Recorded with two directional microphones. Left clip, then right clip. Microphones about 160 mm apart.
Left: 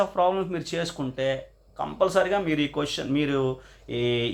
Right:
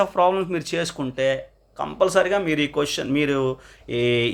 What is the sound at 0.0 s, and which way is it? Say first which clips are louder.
Speech: right 4 dB; 35° right (ahead or behind).